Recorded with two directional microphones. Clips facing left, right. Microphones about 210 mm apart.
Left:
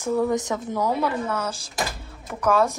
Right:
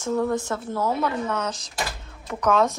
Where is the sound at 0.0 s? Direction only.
10° left (ahead or behind).